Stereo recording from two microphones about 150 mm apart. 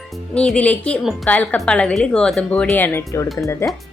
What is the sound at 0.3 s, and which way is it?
A woman's voice, 10° left (ahead or behind).